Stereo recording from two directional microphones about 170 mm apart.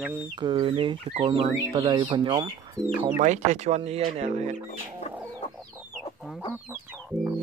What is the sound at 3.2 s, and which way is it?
Speech, 45° right (ahead or behind).